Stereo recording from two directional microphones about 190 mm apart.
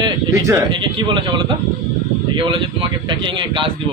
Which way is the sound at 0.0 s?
15° right (ahead or behind).